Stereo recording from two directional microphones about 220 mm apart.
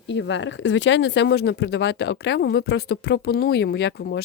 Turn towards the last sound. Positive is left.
turn(degrees=50)  # may be behind; listen again after turning